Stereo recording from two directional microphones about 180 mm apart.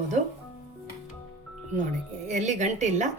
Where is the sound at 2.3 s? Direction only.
40° right (ahead or behind).